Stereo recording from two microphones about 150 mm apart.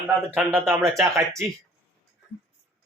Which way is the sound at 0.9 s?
20° right (ahead or behind).